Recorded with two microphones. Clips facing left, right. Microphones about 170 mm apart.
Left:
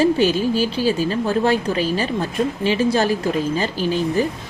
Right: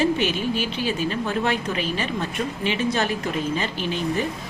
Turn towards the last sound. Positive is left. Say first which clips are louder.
# left 5 dB
turn(degrees=35)  # may be behind; listen again after turning